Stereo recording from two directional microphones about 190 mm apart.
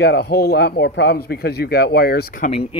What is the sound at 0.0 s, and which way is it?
Speech, 55° left (ahead or behind).